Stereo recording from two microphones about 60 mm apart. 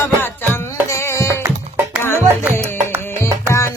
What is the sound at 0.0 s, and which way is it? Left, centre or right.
Music, left.